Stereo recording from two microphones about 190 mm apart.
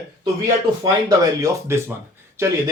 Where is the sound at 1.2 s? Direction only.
20° right (ahead or behind).